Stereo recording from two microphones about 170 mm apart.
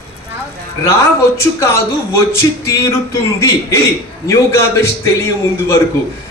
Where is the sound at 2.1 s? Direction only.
15° left (ahead or behind).